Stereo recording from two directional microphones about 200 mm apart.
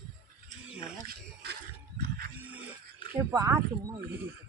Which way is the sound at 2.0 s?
50° right (ahead or behind).